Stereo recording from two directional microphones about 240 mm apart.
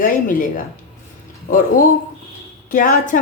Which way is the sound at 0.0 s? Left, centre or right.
Left.